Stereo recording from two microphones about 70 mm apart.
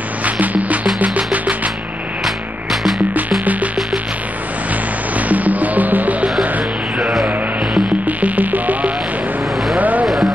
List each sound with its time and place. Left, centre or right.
0.2 s music: right
2.2 s music: centre
3.2 s music: right
5.1 s music: right
7.0 s music: centre
8.0 s music: right
9.8 s a sound: right
10.0 s music: centre